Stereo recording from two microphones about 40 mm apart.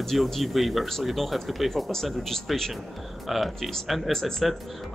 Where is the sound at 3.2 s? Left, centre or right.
Centre.